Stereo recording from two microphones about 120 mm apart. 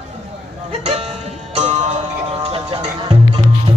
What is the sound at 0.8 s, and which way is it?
Music, 60° right (ahead or behind).